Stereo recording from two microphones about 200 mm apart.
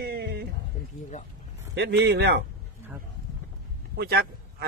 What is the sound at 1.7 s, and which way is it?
Speech, 55° right (ahead or behind).